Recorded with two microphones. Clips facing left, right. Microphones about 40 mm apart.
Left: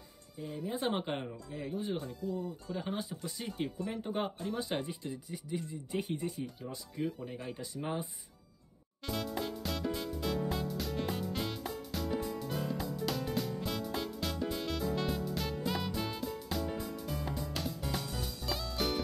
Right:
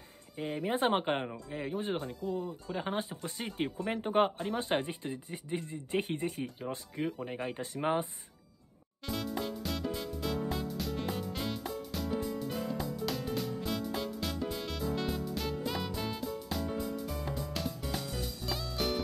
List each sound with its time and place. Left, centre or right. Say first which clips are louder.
0.4 s speech: right 5 dB; right
0.7 s speech: right 5 dB; right
9.0 s music: right 1 dB; centre